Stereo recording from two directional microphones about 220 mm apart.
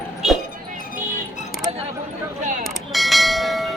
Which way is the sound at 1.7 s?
25° right (ahead or behind).